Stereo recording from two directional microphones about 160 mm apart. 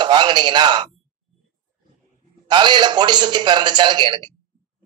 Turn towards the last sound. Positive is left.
turn(degrees=-30)  # may be behind; listen again after turning